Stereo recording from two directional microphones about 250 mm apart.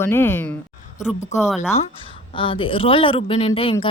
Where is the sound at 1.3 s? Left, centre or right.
Left.